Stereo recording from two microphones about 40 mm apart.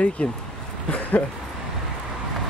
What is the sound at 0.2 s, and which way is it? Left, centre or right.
Speech, left.